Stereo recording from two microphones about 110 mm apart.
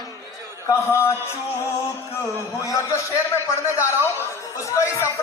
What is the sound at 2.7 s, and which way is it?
A man's voice, 30° left (ahead or behind).